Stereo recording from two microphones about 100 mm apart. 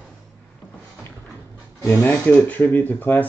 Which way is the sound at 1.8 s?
35° left (ahead or behind).